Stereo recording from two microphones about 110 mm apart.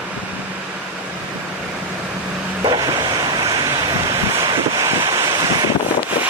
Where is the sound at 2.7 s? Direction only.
35° right (ahead or behind).